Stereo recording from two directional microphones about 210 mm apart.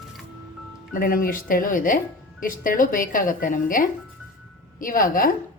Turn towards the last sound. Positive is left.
turn(degrees=40)  # may be behind; listen again after turning